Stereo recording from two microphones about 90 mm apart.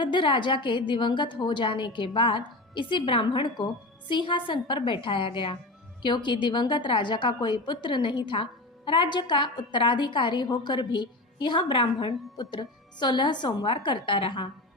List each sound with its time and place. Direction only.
0.0 s a woman's voice: 65° left (ahead or behind)